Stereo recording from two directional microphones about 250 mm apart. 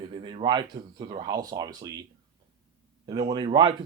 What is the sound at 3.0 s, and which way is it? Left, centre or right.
Speech, centre.